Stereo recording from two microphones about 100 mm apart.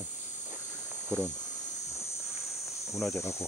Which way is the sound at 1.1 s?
20° right (ahead or behind).